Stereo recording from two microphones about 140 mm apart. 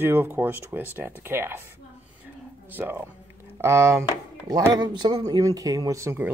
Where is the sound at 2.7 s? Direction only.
15° right (ahead or behind).